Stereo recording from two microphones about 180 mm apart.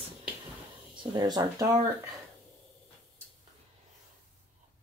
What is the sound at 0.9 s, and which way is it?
Speech, 25° right (ahead or behind).